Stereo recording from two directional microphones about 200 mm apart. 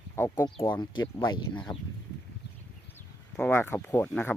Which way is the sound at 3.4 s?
10° left (ahead or behind).